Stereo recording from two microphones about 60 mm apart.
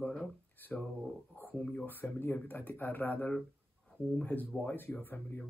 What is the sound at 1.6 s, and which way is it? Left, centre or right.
Speech, left.